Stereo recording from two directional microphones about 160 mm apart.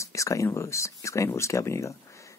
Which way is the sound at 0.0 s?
20° left (ahead or behind).